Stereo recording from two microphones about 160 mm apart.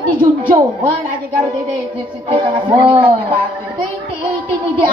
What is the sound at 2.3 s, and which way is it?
Speech, 30° right (ahead or behind).